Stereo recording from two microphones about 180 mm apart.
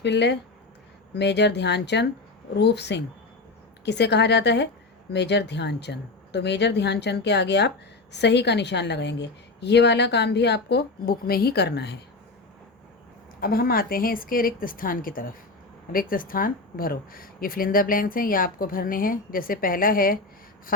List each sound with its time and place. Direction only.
0.0 s a woman's voice: 75° left (ahead or behind)
13.4 s speech: 55° left (ahead or behind)